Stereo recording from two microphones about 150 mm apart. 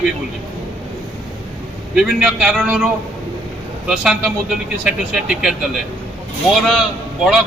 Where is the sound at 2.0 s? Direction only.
5° right (ahead or behind).